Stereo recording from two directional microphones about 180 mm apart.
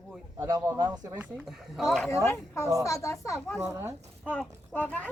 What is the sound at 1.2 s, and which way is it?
Speech, 5° right (ahead or behind).